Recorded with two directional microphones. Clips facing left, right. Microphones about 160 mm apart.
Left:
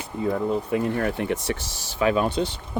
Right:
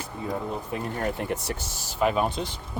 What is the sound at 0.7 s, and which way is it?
Speech, 90° left.